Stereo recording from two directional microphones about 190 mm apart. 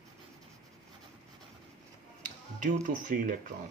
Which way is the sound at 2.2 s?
40° right (ahead or behind).